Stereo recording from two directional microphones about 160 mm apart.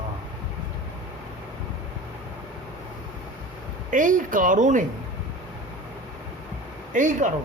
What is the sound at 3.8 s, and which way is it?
Speech, 55° right (ahead or behind).